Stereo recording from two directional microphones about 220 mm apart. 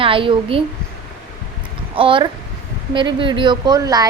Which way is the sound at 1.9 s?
25° right (ahead or behind).